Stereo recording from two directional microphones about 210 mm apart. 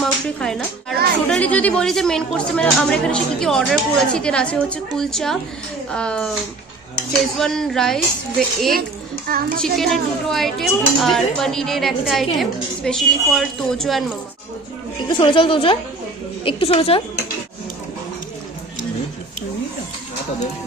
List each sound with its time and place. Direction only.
0.0 s speech: centre (ahead or behind)
7.3 s speech: centre (ahead or behind)
15.0 s speech: 25° left (ahead or behind)